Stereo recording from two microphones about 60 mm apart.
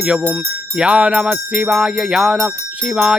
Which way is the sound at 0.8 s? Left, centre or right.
Centre.